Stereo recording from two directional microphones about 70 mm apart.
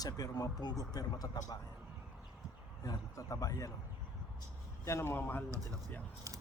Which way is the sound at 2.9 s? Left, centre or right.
Left.